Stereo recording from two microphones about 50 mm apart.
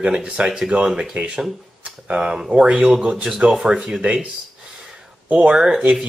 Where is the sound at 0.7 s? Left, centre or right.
Right; by 3.0 s centre.